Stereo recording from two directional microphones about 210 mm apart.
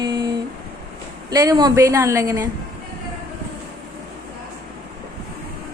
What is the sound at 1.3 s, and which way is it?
A woman's voice, 15° right (ahead or behind).